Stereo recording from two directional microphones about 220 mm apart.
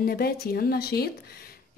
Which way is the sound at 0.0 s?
45° left (ahead or behind).